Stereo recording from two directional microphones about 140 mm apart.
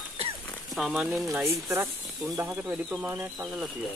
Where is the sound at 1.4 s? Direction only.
20° right (ahead or behind).